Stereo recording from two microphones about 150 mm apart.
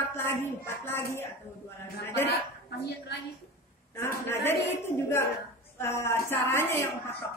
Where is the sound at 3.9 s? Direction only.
15° left (ahead or behind).